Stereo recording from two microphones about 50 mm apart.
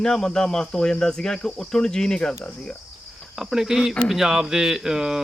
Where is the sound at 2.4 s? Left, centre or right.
Left.